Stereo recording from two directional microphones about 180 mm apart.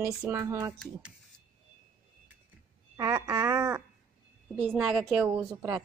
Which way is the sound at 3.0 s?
15° right (ahead or behind).